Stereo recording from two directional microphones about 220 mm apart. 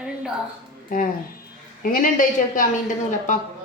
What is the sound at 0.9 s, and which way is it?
Speech, 40° left (ahead or behind).